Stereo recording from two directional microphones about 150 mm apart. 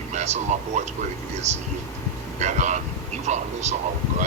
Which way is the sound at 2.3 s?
50° right (ahead or behind).